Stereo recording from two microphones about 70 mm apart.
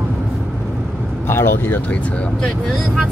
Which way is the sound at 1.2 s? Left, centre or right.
Left.